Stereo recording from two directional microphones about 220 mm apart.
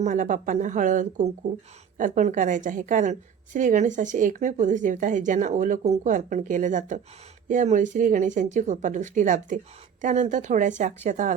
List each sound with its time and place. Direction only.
0.0 s a woman's voice: 35° right (ahead or behind)